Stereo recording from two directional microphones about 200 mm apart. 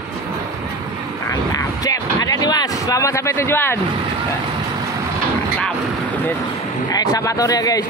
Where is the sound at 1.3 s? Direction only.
15° left (ahead or behind).